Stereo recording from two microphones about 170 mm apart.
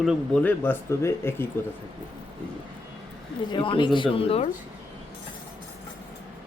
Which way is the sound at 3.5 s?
30° left (ahead or behind).